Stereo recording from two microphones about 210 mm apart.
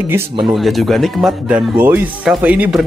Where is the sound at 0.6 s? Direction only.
Centre (ahead or behind).